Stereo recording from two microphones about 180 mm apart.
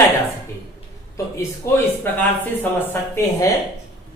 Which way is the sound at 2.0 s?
10° left (ahead or behind).